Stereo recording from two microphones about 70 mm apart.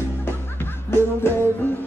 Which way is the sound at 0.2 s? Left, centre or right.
Left.